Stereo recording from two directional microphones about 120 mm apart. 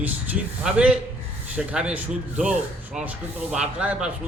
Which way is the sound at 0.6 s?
10° right (ahead or behind).